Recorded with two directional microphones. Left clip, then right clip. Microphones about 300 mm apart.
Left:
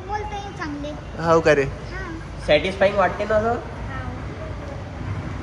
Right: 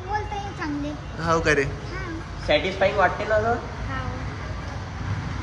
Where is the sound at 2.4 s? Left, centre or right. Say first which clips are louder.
Left 3 dB; left.